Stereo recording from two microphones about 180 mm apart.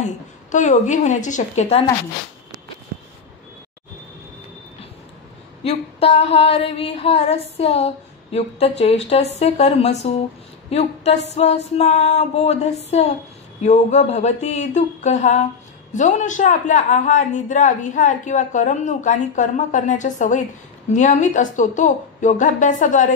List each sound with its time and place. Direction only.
0.5 s speech: 45° left (ahead or behind)
5.6 s a sound: 35° left (ahead or behind)
15.9 s speech: 45° left (ahead or behind)